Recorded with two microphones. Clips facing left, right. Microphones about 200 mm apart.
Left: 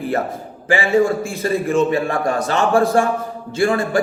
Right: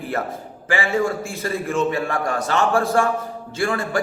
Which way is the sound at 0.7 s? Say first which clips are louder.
Left 5 dB; 25° left (ahead or behind).